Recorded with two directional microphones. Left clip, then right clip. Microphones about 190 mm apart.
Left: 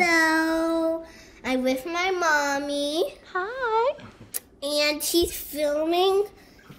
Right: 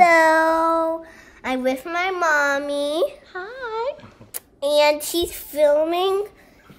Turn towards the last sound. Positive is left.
turn(degrees=-10)  # may be behind; listen again after turning